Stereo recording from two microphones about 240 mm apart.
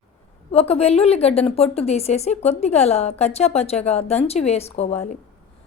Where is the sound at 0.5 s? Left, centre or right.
Left.